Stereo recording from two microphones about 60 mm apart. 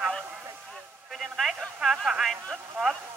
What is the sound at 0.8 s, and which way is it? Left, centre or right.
Speech, centre.